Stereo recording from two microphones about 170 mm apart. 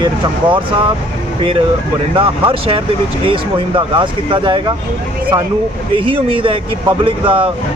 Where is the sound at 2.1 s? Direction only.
30° right (ahead or behind).